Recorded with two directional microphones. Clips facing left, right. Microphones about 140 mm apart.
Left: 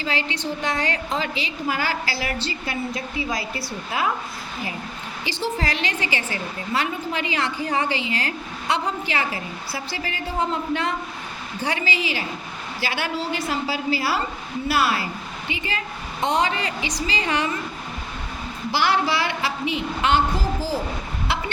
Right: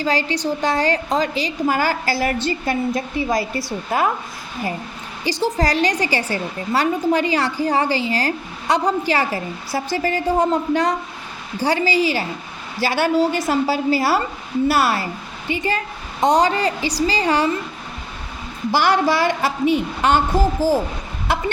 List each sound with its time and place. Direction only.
0.0 s a woman's voice: 40° right (ahead or behind)
5.2 s a woman's voice: 40° right (ahead or behind)
18.7 s a woman's voice: 45° right (ahead or behind)